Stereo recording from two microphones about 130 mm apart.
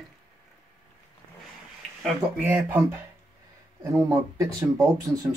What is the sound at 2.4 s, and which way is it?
Speech, 15° right (ahead or behind).